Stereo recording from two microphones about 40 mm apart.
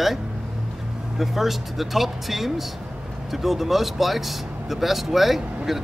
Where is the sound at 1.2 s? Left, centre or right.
Centre.